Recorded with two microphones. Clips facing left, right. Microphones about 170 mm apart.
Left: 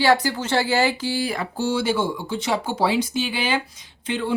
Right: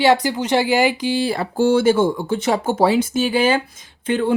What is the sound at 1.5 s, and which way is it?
Speech, 50° right (ahead or behind).